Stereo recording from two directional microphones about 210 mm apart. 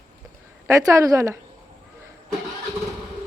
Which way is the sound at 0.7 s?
15° right (ahead or behind).